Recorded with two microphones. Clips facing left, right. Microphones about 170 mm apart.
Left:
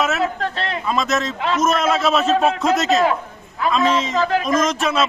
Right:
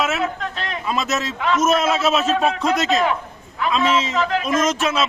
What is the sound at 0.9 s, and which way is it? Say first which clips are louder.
A man's voice: left 2 dB; 5° right (ahead or behind).